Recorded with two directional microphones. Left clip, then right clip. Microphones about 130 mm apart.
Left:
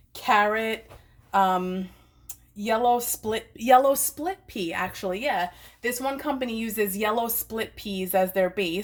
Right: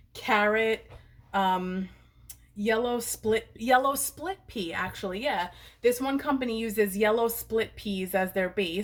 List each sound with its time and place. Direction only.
0.1 s a woman's voice: 40° left (ahead or behind)